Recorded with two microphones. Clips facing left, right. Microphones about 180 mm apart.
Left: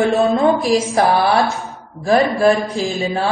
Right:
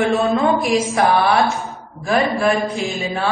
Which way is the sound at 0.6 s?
35° left (ahead or behind).